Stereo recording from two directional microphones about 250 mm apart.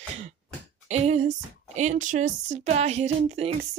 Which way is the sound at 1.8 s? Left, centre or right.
Right.